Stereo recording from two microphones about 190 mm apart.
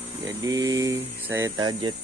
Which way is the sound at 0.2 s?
20° right (ahead or behind).